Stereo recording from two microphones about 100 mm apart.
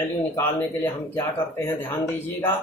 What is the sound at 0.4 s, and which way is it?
Speech, 20° left (ahead or behind).